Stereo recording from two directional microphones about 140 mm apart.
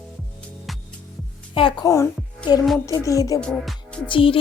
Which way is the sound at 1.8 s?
20° left (ahead or behind).